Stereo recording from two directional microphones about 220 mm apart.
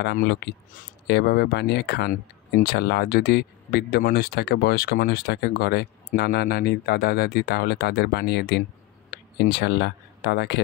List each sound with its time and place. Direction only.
0.0 s speech: 50° left (ahead or behind)